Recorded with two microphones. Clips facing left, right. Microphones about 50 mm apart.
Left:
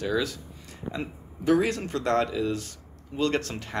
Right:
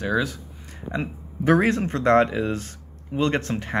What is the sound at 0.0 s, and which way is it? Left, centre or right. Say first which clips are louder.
Speech: right 3 dB; right.